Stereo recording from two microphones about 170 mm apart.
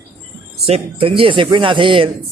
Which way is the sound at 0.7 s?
30° right (ahead or behind).